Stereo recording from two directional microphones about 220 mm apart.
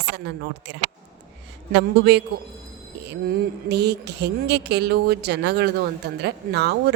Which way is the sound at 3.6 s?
50° right (ahead or behind).